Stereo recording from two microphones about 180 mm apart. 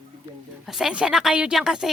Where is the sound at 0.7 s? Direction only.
5° right (ahead or behind).